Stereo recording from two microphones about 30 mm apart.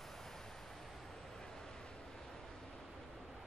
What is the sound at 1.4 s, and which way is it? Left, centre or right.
Vehicle, centre.